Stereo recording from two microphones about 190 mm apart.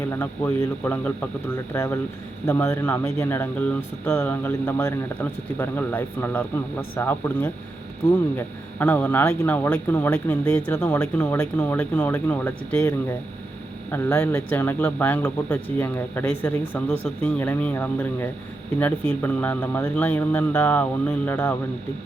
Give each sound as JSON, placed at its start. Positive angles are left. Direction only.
{"t": 0.1, "sound": "a man's voice", "side_deg": 15}